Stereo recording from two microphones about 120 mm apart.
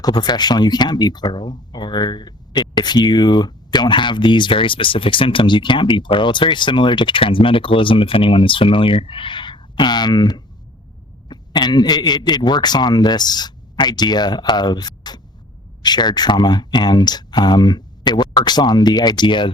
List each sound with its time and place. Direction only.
0.0 s a man's voice: 35° left (ahead or behind)